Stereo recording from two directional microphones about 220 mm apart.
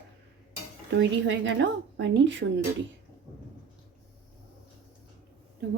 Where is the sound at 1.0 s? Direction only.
55° right (ahead or behind).